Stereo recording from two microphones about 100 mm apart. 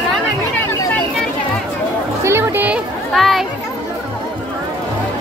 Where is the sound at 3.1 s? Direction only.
Centre (ahead or behind).